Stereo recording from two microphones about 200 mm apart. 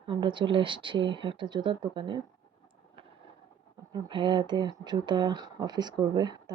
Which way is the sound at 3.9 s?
25° right (ahead or behind).